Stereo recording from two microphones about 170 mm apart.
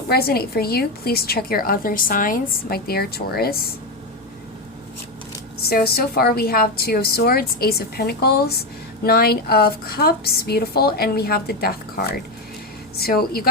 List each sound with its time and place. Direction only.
0.1 s a woman's voice: 65° left (ahead or behind)
5.6 s a woman's voice: 65° left (ahead or behind)